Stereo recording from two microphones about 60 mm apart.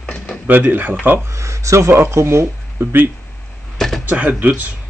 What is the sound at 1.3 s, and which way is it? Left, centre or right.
Speech, right.